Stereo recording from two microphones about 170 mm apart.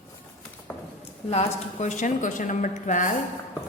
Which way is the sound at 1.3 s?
40° left (ahead or behind).